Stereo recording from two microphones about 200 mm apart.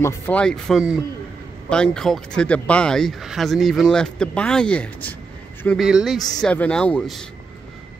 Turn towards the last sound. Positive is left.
turn(degrees=5)  # may be behind; listen again after turning